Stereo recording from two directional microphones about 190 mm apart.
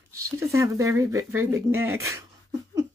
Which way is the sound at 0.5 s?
15° right (ahead or behind).